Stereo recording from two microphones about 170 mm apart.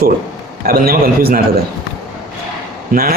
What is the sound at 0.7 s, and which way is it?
Speech, 65° right (ahead or behind).